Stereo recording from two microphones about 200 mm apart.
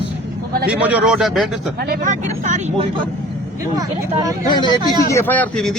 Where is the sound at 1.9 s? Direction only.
40° right (ahead or behind).